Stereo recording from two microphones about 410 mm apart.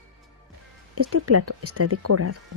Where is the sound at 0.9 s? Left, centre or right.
Right.